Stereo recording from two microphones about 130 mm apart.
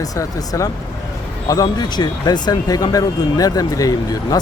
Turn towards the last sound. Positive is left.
turn(degrees=25)  # may be behind; listen again after turning